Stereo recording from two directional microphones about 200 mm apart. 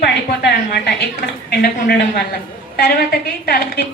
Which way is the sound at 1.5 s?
50° left (ahead or behind).